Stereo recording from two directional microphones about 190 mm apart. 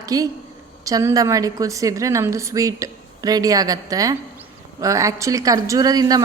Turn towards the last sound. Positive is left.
turn(degrees=-20)  # may be behind; listen again after turning